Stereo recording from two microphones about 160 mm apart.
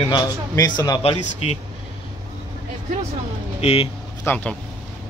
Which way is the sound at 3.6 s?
40° left (ahead or behind).